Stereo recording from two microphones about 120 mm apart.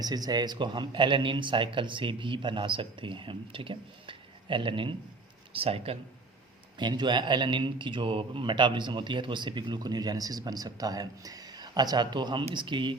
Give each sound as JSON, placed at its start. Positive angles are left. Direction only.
{"t": 0.0, "sound": "a man's voice", "side_deg": -35}
{"t": 6.7, "sound": "speech", "side_deg": -40}